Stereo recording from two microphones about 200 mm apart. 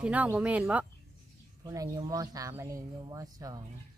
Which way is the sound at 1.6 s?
20° right (ahead or behind).